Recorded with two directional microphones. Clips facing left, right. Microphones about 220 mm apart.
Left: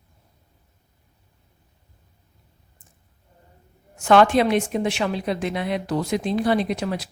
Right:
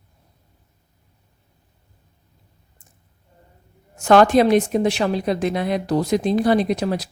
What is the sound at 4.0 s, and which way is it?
Speech, 40° right (ahead or behind).